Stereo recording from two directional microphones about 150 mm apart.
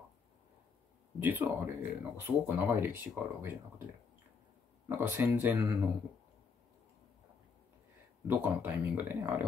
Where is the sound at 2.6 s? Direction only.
15° right (ahead or behind).